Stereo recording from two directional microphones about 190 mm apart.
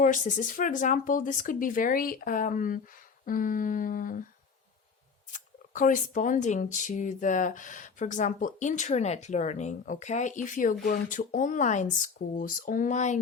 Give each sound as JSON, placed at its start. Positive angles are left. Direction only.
{"t": 0.0, "sound": "speech", "side_deg": 40}
{"t": 5.7, "sound": "speech", "side_deg": 45}